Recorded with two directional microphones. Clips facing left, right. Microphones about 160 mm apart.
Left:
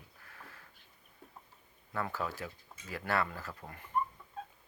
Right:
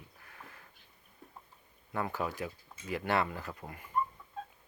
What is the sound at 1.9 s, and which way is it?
Speech, 15° right (ahead or behind).